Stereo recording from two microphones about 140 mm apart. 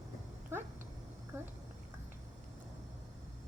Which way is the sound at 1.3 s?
15° right (ahead or behind).